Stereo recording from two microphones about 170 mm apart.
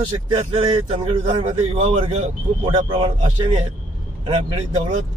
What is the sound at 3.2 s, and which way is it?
A man's voice, 40° right (ahead or behind).